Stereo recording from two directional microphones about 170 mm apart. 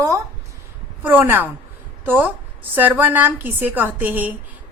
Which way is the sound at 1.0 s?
10° right (ahead or behind).